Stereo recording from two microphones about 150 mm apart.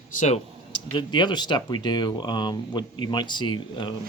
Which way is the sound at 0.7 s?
30° left (ahead or behind).